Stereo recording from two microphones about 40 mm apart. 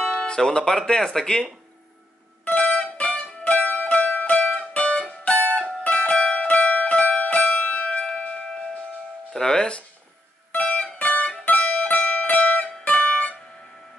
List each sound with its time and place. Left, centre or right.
0.0 s speech: left
2.4 s music: left
5.9 s music: left
9.3 s speech: centre
10.5 s music: left